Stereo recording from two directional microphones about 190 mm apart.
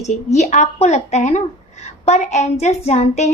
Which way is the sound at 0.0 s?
35° left (ahead or behind).